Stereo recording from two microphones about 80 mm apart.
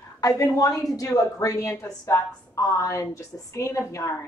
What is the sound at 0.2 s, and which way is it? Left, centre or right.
A woman's voice, left.